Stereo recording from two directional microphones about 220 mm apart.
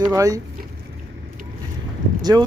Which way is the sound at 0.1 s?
15° right (ahead or behind).